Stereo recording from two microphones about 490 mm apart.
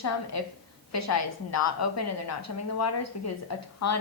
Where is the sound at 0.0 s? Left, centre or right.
Left.